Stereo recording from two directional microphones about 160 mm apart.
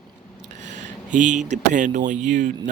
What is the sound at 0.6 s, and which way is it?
Speech, 50° right (ahead or behind).